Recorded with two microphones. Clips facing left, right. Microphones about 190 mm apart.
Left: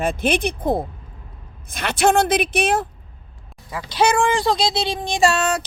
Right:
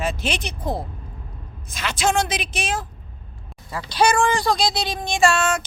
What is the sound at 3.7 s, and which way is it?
Speech, 20° left (ahead or behind).